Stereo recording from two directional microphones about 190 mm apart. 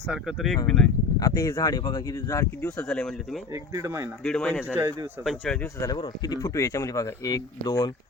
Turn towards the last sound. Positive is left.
turn(degrees=20)  # may be behind; listen again after turning